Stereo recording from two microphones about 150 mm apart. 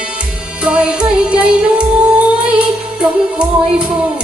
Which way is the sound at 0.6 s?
5° right (ahead or behind).